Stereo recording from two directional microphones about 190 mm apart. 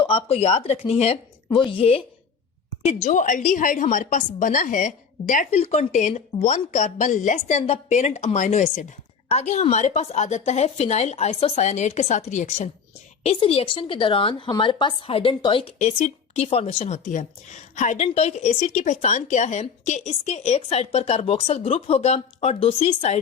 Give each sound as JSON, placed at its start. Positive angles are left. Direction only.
{"t": 0.0, "sound": "a woman's voice", "side_deg": 30}
{"t": 3.0, "sound": "a woman's voice", "side_deg": 40}